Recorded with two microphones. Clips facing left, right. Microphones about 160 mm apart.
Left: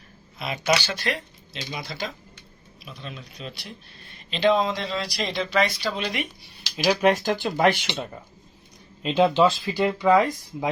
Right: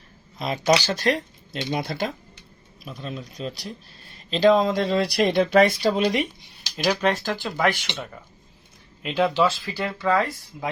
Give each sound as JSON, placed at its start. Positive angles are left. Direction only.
{"t": 0.3, "sound": "speech", "side_deg": -35}
{"t": 1.7, "sound": "speech", "side_deg": -55}
{"t": 2.9, "sound": "speech", "side_deg": -40}
{"t": 6.7, "sound": "speech", "side_deg": 5}